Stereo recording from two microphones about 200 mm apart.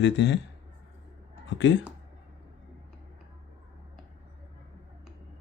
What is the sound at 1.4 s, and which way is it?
Speech, 65° left (ahead or behind).